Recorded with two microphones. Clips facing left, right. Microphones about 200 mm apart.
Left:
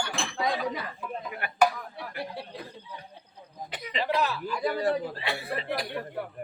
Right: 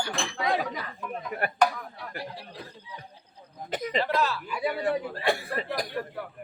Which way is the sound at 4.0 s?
15° left (ahead or behind).